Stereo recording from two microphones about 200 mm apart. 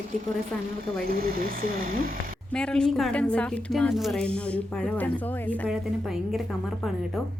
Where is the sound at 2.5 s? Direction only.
5° left (ahead or behind).